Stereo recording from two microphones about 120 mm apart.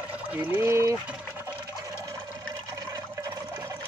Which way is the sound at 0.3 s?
20° right (ahead or behind).